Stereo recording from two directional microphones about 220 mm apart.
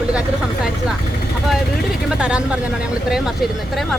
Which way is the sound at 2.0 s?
5° right (ahead or behind).